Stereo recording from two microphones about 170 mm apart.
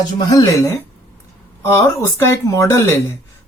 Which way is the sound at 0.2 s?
20° left (ahead or behind).